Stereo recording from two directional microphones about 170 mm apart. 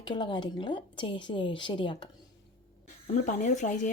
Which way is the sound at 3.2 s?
45° left (ahead or behind).